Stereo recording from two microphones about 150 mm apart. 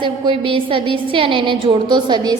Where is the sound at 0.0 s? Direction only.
35° right (ahead or behind).